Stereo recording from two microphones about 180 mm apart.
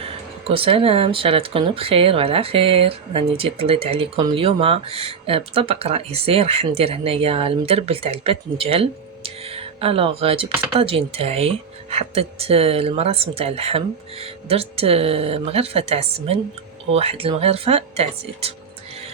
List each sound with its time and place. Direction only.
0.0 s speech: 30° right (ahead or behind)